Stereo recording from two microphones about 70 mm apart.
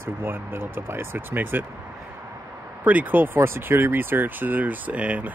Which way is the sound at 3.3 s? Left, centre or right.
Right.